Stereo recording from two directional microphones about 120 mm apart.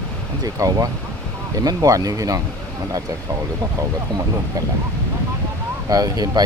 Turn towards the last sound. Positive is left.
turn(degrees=-35)  # may be behind; listen again after turning